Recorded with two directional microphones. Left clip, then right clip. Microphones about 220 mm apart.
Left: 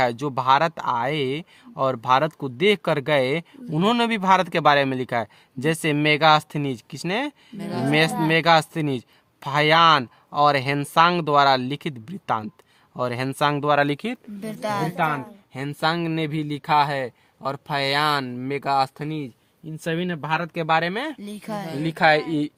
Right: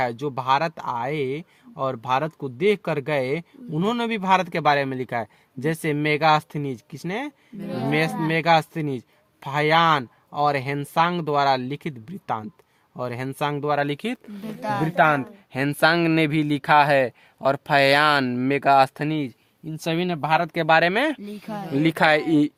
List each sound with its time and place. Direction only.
0.0 s speech: 25° left (ahead or behind)
14.6 s speech: 30° left (ahead or behind)
14.9 s speech: 45° right (ahead or behind)
21.2 s speech: 35° left (ahead or behind)
21.8 s speech: 35° right (ahead or behind)